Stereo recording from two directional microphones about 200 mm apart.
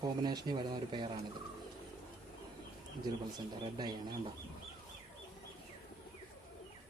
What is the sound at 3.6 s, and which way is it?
Speech, 20° right (ahead or behind).